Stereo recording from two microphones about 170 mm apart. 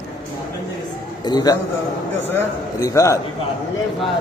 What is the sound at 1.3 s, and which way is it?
Speech, 25° left (ahead or behind).